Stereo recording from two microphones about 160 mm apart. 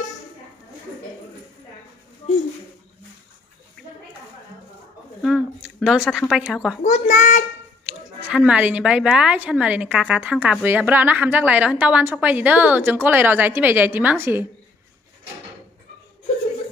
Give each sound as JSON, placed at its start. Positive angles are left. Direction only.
{"t": 5.2, "sound": "a sound", "side_deg": -5}
{"t": 6.3, "sound": "speech", "side_deg": -5}
{"t": 6.8, "sound": "a child's voice", "side_deg": 50}
{"t": 7.8, "sound": "speech", "side_deg": -10}